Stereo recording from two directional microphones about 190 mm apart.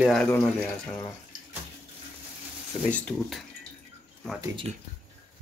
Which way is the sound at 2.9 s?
5° left (ahead or behind).